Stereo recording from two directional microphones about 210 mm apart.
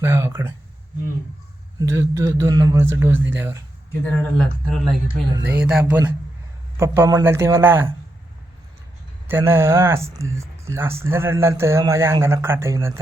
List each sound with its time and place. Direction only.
0.0 s speech: 10° right (ahead or behind)
1.8 s speech: 15° right (ahead or behind)
4.0 s speech: 5° left (ahead or behind)
5.4 s speech: 50° right (ahead or behind)
6.7 s speech: 15° right (ahead or behind)
9.2 s speech: 10° right (ahead or behind)